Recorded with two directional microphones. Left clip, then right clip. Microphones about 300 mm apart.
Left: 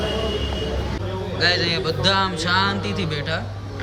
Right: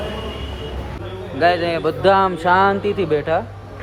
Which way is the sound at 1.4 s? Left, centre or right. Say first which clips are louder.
Right 4 dB; centre.